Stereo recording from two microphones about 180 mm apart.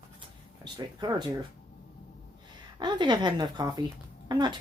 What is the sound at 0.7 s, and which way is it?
Speech, 20° right (ahead or behind).